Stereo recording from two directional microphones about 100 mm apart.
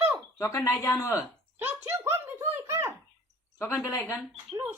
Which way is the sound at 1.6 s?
20° right (ahead or behind).